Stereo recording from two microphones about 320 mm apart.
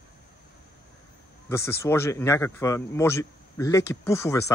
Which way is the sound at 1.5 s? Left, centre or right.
Centre.